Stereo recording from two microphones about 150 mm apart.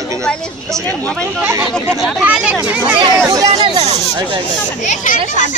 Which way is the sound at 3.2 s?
25° right (ahead or behind).